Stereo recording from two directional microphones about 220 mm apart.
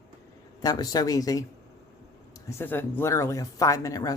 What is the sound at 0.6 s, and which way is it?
Speech, 15° left (ahead or behind).